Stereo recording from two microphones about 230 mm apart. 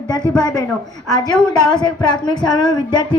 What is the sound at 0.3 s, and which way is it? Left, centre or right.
Speech, centre.